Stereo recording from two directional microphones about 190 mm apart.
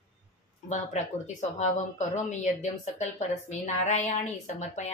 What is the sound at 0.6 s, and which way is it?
A woman's voice, 40° left (ahead or behind).